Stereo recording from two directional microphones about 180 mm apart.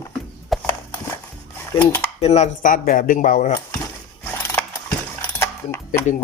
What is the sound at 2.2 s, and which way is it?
Speech, 35° left (ahead or behind).